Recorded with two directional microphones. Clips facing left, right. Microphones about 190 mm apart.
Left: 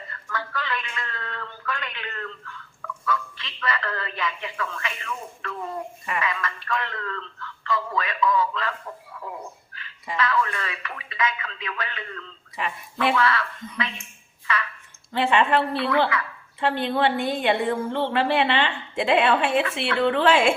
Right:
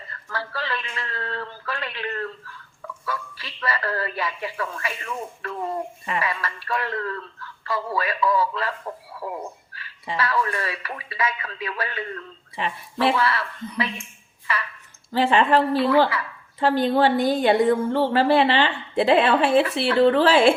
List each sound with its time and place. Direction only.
0.3 s a sound: 35° right (ahead or behind)
3.1 s a man's voice: 35° right (ahead or behind)
9.7 s a woman's voice: 30° right (ahead or behind)
15.1 s a woman's voice: 35° right (ahead or behind)